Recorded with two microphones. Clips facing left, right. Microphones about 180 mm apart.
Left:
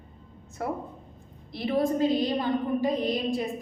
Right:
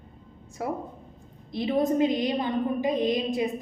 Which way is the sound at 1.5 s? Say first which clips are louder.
Right 2 dB; 20° right (ahead or behind).